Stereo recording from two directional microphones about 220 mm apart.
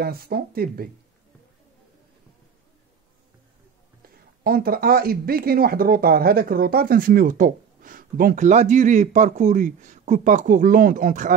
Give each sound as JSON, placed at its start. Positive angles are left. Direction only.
{"t": 0.0, "sound": "speech", "side_deg": -45}
{"t": 4.4, "sound": "speech", "side_deg": -40}